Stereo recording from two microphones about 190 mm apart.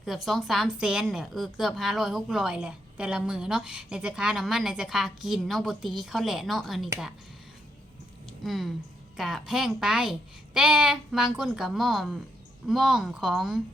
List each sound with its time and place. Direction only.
0.0 s a woman's voice: centre (ahead or behind)
8.3 s a sound: centre (ahead or behind)
9.1 s a woman's voice: centre (ahead or behind)